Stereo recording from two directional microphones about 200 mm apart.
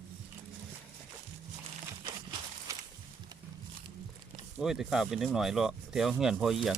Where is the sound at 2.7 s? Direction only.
15° right (ahead or behind).